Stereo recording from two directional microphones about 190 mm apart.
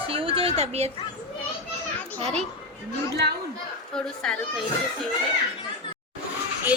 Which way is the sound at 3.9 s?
5° left (ahead or behind).